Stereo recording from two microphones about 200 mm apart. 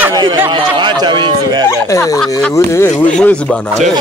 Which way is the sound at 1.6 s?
15° left (ahead or behind).